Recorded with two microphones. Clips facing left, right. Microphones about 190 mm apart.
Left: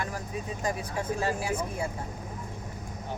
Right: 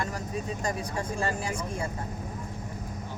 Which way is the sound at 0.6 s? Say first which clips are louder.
Even; 5° left (ahead or behind).